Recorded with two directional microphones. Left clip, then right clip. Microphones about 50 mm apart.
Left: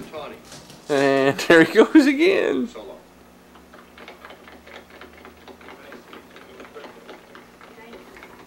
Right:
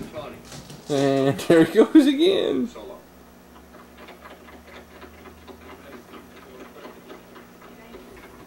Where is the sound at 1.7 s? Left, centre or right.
Left.